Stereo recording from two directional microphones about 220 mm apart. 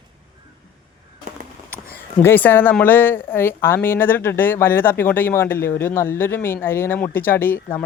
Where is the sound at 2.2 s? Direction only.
10° left (ahead or behind).